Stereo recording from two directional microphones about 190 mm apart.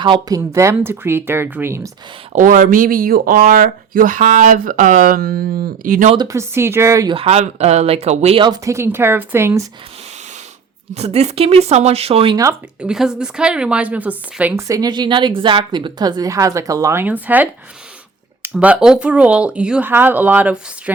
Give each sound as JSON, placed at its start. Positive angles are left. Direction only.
{"t": 0.0, "sound": "a woman's voice", "side_deg": -20}
{"t": 2.3, "sound": "speech", "side_deg": -45}
{"t": 6.1, "sound": "a woman's voice", "side_deg": -15}
{"t": 7.1, "sound": "speech", "side_deg": -30}
{"t": 10.9, "sound": "speech", "side_deg": -35}
{"t": 12.5, "sound": "a woman's voice", "side_deg": -5}